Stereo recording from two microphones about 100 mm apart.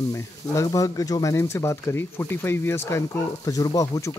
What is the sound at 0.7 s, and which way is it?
Speech, 35° left (ahead or behind).